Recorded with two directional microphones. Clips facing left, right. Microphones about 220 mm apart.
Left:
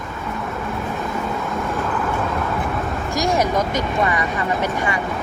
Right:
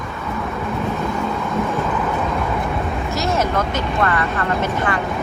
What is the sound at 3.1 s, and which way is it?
Vehicle, 15° left (ahead or behind).